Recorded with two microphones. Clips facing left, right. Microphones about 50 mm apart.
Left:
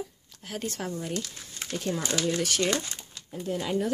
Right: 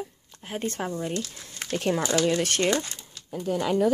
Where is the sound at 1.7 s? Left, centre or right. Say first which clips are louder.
Right 5 dB; right.